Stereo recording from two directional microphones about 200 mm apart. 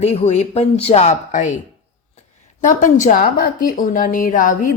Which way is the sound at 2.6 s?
40° left (ahead or behind).